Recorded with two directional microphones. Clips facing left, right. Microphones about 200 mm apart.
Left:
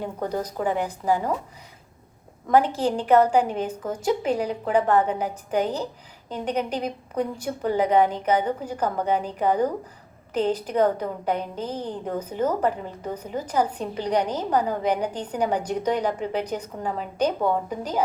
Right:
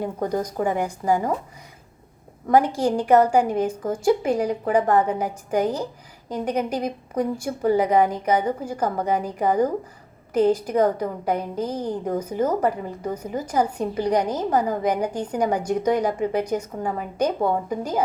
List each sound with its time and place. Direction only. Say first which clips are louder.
0.0 s a woman's voice: right 3 dB; 10° right (ahead or behind)
0.6 s a woman's voice: even; 45° right (ahead or behind)
2.5 s a woman's voice: right 2 dB; 10° right (ahead or behind)